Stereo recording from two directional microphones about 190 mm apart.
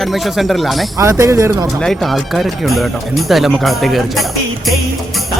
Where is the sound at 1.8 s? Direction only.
Centre (ahead or behind).